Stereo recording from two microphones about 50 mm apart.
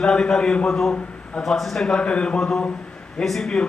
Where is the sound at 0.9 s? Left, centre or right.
Left.